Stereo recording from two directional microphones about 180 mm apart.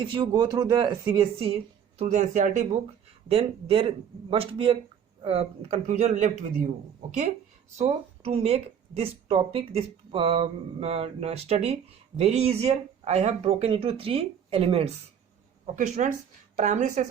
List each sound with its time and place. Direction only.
0.0 s speech: 30° right (ahead or behind)
2.0 s speech: 40° right (ahead or behind)
7.8 s speech: 35° right (ahead or behind)